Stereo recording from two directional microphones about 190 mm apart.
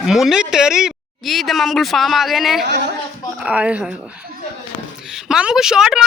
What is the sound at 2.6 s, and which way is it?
Speech, 65° right (ahead or behind).